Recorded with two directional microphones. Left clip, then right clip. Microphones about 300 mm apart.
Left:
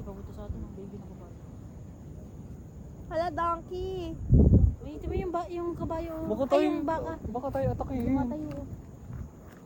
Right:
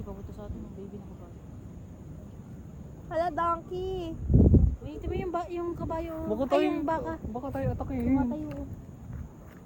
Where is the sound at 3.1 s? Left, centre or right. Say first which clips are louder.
Right 1 dB; centre.